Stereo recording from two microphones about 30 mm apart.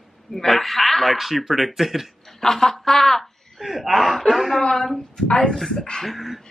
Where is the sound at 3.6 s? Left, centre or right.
Centre.